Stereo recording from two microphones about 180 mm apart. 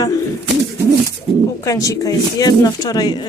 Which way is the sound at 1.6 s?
20° left (ahead or behind).